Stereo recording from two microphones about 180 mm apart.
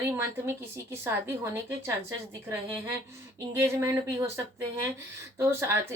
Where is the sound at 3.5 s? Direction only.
15° right (ahead or behind).